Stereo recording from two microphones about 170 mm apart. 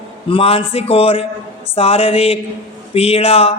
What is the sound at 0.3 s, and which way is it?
Speech, 35° left (ahead or behind).